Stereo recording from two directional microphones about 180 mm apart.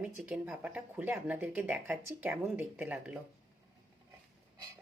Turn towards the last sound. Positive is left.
turn(degrees=-10)  # may be behind; listen again after turning